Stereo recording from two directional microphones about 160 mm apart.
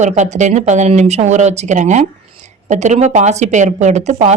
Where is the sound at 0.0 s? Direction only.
45° right (ahead or behind).